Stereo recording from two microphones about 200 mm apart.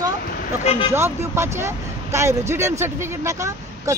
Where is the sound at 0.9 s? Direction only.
15° right (ahead or behind).